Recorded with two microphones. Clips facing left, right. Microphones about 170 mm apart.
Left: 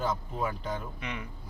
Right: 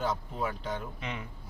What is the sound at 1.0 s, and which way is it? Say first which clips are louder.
Speech: even; 25° right (ahead or behind).